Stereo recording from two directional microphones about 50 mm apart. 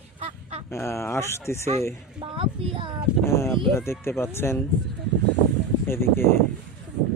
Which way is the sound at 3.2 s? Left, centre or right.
Left.